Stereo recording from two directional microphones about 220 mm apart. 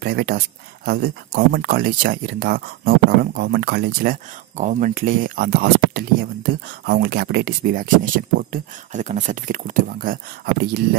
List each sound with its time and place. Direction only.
0.0 s speech: 45° right (ahead or behind)